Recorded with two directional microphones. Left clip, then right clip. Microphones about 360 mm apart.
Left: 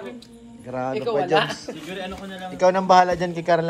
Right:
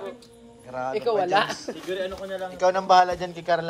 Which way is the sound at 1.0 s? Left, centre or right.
Right.